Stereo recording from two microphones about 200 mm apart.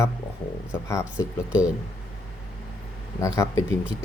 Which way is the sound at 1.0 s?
5° right (ahead or behind).